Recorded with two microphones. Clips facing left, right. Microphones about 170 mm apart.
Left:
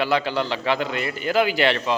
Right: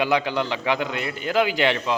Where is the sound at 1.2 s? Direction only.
5° left (ahead or behind).